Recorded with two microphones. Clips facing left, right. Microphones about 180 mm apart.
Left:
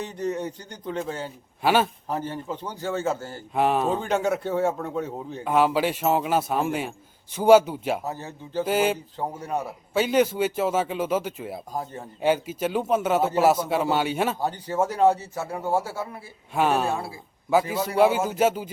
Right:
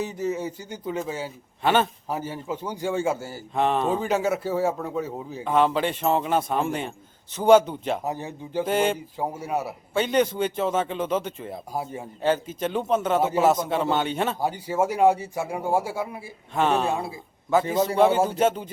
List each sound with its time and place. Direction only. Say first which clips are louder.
0.0 s a man's voice: right 1 dB; 5° right (ahead or behind)
1.6 s a man's voice: even; 5° left (ahead or behind)
2.0 s a man's voice: even; 10° right (ahead or behind)
3.5 s a man's voice: even; 5° left (ahead or behind)
8.0 s a man's voice: right 3 dB; 15° right (ahead or behind)
8.6 s speech: even; 5° left (ahead or behind)
9.1 s a man's voice: right 1 dB; 10° right (ahead or behind)
9.9 s a man's voice: left 1 dB; 5° left (ahead or behind)
11.7 s a man's voice: right 4 dB; 10° right (ahead or behind)
12.2 s a man's voice: left 1 dB; 10° left (ahead or behind)
14.3 s a man's voice: right 1 dB; 10° right (ahead or behind)
16.6 s a man's voice: even; 5° left (ahead or behind)
16.9 s a man's voice: right 1 dB; 20° right (ahead or behind)
17.5 s a man's voice: right 1 dB; 5° left (ahead or behind)